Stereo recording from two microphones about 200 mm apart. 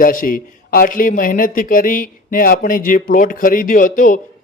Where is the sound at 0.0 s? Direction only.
45° left (ahead or behind).